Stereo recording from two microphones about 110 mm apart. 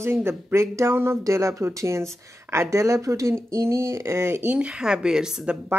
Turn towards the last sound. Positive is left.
turn(degrees=-10)  # may be behind; listen again after turning